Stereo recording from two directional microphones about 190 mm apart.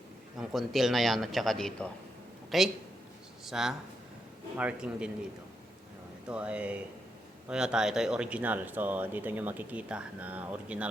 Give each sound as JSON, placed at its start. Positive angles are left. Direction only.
{"t": 0.3, "sound": "a man's voice", "side_deg": 0}
{"t": 6.2, "sound": "speech", "side_deg": -5}